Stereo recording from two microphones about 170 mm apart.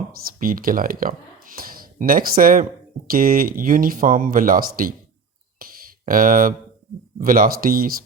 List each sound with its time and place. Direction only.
0.3 s speech: 55° right (ahead or behind)
5.5 s a sound: 55° right (ahead or behind)
7.2 s speech: 55° right (ahead or behind)